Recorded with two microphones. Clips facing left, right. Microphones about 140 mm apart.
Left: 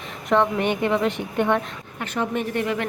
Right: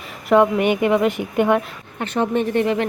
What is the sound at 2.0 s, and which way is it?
Speech, 25° right (ahead or behind).